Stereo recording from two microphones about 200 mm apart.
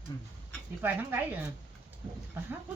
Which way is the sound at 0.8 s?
10° right (ahead or behind).